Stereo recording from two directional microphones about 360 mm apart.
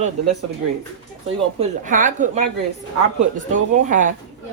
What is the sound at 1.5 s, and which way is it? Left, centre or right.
Speech, right.